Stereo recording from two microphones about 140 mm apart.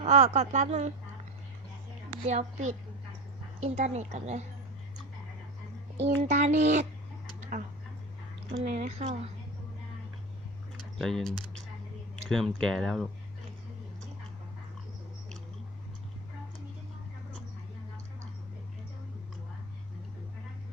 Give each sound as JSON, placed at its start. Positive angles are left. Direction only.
{"t": 0.0, "sound": "a woman's voice", "side_deg": -50}
{"t": 2.2, "sound": "a woman's voice", "side_deg": -55}
{"t": 6.0, "sound": "a woman's voice", "side_deg": -55}
{"t": 8.7, "sound": "a woman's voice", "side_deg": -50}
{"t": 10.9, "sound": "speech", "side_deg": 0}